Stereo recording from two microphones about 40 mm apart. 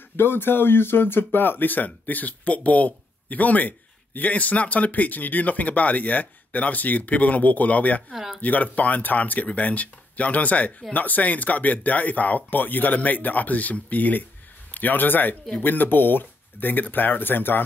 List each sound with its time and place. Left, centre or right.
0.2 s speech: left
8.1 s speech: centre
8.4 s speech: left